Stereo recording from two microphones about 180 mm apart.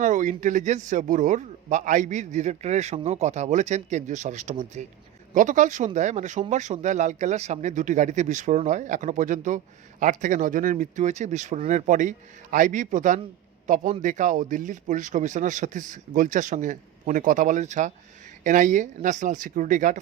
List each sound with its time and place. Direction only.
0.0 s a man's voice: 45° right (ahead or behind)